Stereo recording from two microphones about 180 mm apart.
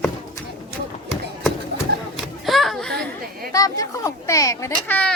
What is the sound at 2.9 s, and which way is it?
Chatter, 55° right (ahead or behind).